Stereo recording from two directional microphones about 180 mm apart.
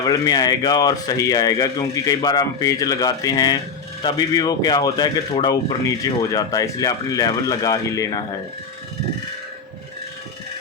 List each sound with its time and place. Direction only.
0.0 s speech: 20° left (ahead or behind)